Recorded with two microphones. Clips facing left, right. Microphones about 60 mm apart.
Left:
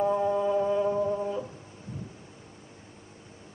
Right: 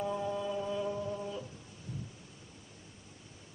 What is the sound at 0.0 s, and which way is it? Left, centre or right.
Music, left.